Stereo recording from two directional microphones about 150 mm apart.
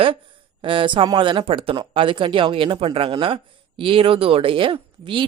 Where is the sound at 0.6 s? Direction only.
35° right (ahead or behind).